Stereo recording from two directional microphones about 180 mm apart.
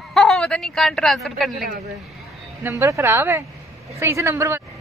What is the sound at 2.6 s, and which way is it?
Speech, 15° right (ahead or behind).